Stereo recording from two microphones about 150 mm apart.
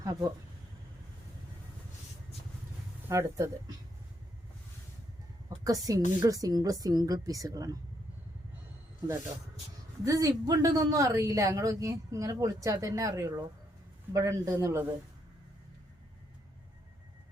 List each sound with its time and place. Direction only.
0.0 s speech: 20° right (ahead or behind)
3.1 s speech: 20° right (ahead or behind)
5.6 s speech: 25° right (ahead or behind)
10.0 s speech: 20° right (ahead or behind)